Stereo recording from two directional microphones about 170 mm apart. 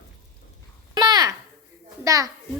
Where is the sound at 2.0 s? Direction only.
20° right (ahead or behind).